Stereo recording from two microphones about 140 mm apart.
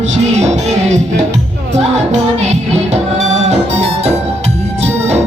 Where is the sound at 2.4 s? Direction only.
50° right (ahead or behind).